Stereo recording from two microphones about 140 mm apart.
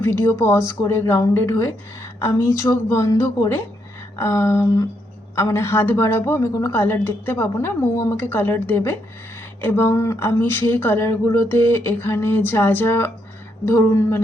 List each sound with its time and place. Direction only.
0.0 s a woman's voice: 15° left (ahead or behind)